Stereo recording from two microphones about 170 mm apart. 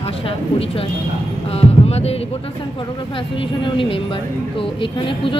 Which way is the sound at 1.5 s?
35° left (ahead or behind).